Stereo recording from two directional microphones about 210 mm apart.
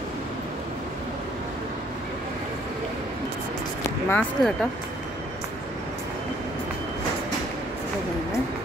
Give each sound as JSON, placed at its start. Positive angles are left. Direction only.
{"t": 4.1, "sound": "speech", "side_deg": 5}